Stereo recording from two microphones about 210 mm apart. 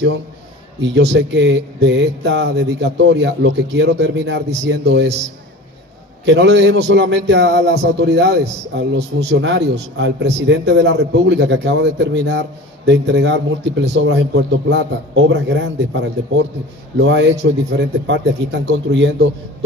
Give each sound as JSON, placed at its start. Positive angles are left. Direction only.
{"t": 0.7, "sound": "a man's voice", "side_deg": -55}
{"t": 6.2, "sound": "a man's voice", "side_deg": -55}